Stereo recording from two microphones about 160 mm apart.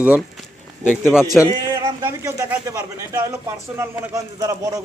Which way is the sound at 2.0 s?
20° right (ahead or behind).